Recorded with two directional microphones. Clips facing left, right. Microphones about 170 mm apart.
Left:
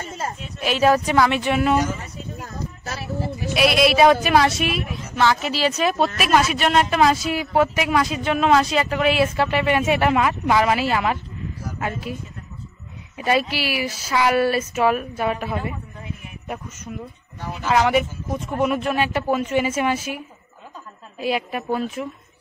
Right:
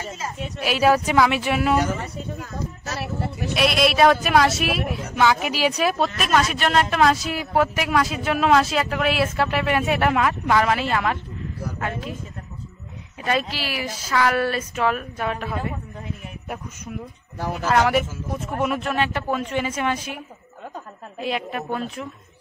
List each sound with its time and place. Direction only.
0.6 s speech: 5° right (ahead or behind)
3.0 s a sound: 65° right (ahead or behind)
3.5 s speech: centre (ahead or behind)
5.9 s speech: 5° left (ahead or behind)
13.2 s a woman's voice: 10° left (ahead or behind)
17.6 s speech: centre (ahead or behind)
21.2 s speech: 5° left (ahead or behind)